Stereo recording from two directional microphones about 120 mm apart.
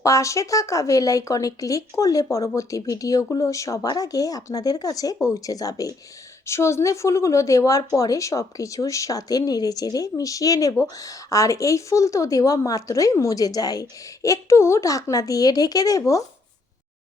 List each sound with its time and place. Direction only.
0.0 s speech: 25° left (ahead or behind)